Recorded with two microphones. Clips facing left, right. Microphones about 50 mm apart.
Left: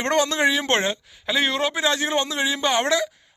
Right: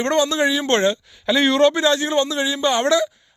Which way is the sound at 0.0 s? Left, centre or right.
Left.